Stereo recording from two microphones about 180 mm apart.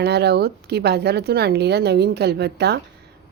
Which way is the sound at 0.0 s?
65° right (ahead or behind).